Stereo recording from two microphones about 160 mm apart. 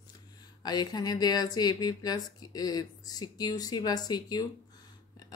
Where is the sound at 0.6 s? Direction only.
25° left (ahead or behind).